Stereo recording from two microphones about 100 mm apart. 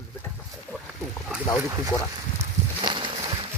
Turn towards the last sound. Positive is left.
turn(degrees=-55)  # may be behind; listen again after turning